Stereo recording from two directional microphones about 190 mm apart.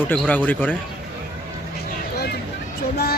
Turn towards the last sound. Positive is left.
turn(degrees=55)  # may be behind; listen again after turning